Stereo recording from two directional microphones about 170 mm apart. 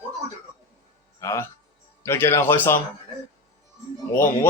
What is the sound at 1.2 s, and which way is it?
Speech, 15° left (ahead or behind).